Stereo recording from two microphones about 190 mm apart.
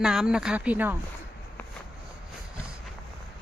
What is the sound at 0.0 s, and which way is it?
Speech, 5° right (ahead or behind).